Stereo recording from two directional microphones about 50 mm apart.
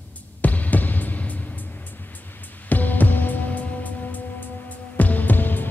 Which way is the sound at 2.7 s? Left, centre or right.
Left.